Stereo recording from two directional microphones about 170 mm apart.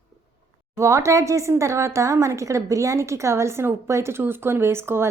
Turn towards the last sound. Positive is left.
turn(degrees=-15)  # may be behind; listen again after turning